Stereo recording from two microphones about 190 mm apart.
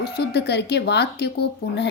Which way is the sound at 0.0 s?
60° left (ahead or behind).